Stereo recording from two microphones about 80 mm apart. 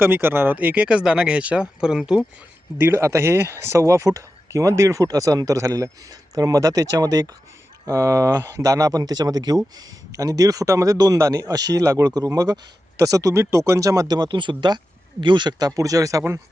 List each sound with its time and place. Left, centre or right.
0.0 s speech: right
2.7 s speech: right
11.2 s speech: right
11.4 s speech: right